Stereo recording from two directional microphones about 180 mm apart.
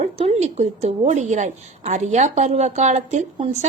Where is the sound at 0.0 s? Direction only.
40° right (ahead or behind).